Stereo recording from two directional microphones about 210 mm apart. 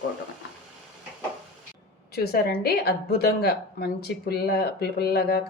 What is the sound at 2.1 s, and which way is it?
A woman's voice, 50° left (ahead or behind).